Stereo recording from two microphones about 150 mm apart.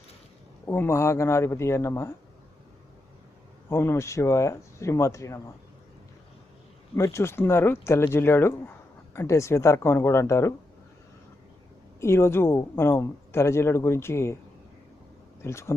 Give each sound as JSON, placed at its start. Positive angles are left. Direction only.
{"t": 0.6, "sound": "a woman's voice", "side_deg": 15}
{"t": 3.7, "sound": "speech", "side_deg": 15}
{"t": 6.9, "sound": "a woman's voice", "side_deg": 20}
{"t": 11.9, "sound": "a woman's voice", "side_deg": 20}
{"t": 15.4, "sound": "speech", "side_deg": 20}